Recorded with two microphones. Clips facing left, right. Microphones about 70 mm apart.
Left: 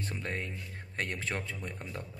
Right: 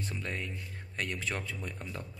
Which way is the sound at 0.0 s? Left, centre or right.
Left.